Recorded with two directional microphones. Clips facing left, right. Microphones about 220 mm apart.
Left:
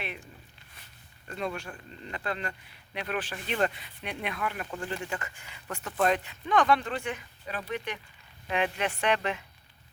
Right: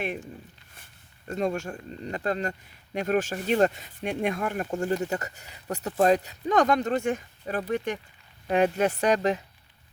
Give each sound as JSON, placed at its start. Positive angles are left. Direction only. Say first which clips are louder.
{"t": 0.0, "sound": "speech", "louder": "right 8 dB", "side_deg": -45}
{"t": 1.3, "sound": "speech", "louder": "right 7 dB", "side_deg": -40}